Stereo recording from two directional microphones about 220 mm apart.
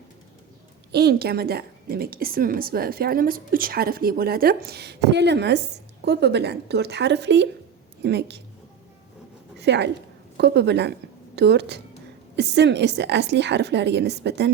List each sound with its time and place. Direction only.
0.9 s a woman's voice: 45° right (ahead or behind)
9.6 s a woman's voice: 50° right (ahead or behind)